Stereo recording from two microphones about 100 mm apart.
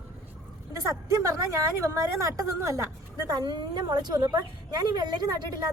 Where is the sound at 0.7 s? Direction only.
35° right (ahead or behind).